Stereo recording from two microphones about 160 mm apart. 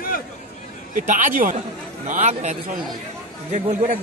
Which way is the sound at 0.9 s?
55° right (ahead or behind).